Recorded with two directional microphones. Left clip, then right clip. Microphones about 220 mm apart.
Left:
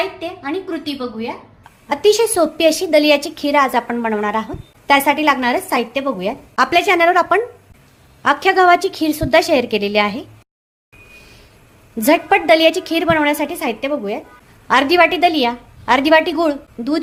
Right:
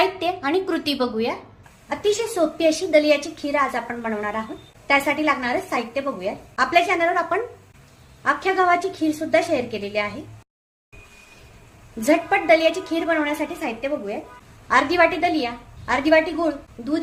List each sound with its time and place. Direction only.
0.0 s speech: 35° right (ahead or behind)
1.9 s a woman's voice: 45° left (ahead or behind)
11.9 s a woman's voice: 45° left (ahead or behind)